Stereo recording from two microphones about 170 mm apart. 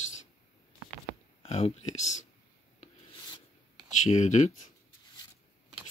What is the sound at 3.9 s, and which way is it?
Speech, 45° left (ahead or behind).